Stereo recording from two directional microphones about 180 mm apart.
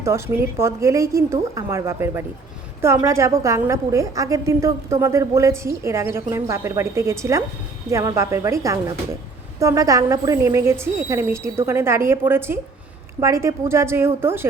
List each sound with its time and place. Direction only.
0.0 s a woman's voice: 15° right (ahead or behind)